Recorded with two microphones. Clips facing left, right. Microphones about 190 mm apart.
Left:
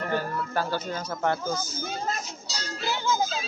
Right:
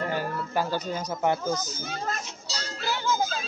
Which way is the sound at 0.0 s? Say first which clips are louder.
Left 1 dB; 15° right (ahead or behind).